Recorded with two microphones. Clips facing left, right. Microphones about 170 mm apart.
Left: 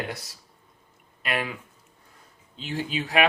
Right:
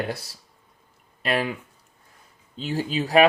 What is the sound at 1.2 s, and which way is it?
Speech, 35° right (ahead or behind).